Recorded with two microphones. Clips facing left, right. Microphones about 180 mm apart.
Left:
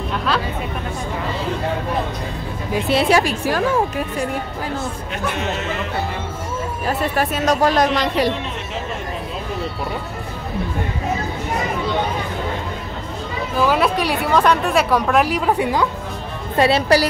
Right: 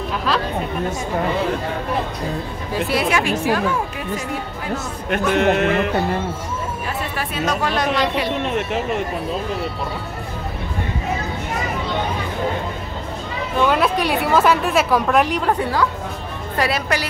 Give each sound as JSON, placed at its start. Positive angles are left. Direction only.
{"t": 2.7, "sound": "a woman's voice", "side_deg": 25}
{"t": 5.1, "sound": "a man's voice", "side_deg": -60}
{"t": 6.9, "sound": "speech", "side_deg": 40}
{"t": 13.6, "sound": "a woman's voice", "side_deg": 0}
{"t": 16.5, "sound": "a woman's voice", "side_deg": 30}